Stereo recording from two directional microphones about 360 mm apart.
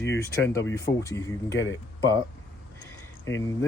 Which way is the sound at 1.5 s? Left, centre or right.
Left.